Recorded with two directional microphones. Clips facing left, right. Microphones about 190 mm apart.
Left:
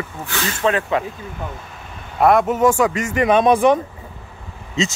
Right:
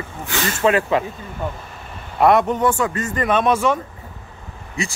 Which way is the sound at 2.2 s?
Centre (ahead or behind).